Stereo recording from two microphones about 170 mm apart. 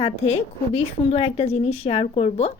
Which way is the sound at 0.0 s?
35° left (ahead or behind).